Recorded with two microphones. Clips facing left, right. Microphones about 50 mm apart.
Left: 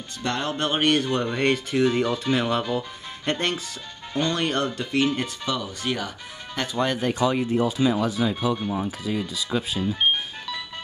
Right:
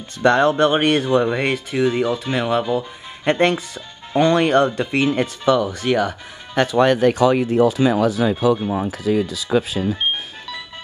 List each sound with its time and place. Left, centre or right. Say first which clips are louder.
0.2 s speech: right 12 dB; right
1.0 s speech: right 5 dB; centre
3.3 s speech: right 9 dB; right
5.7 s speech: right 9 dB; right
6.8 s speech: right 8 dB; right